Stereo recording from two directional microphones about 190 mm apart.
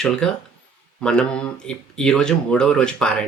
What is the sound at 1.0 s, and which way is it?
Speech, 5° left (ahead or behind).